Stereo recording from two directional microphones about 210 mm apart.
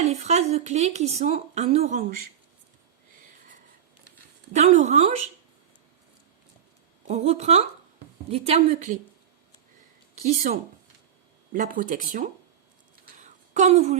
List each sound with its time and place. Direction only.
0.0 s speech: 30° right (ahead or behind)
4.5 s speech: 35° right (ahead or behind)
7.1 s speech: 30° right (ahead or behind)
10.5 s speech: 40° right (ahead or behind)
13.1 s a sound: 35° right (ahead or behind)